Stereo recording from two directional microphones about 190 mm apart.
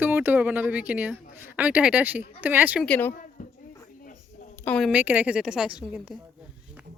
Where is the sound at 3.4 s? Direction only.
45° left (ahead or behind).